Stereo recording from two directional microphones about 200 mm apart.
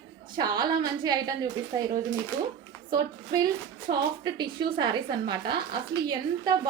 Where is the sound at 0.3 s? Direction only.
20° right (ahead or behind).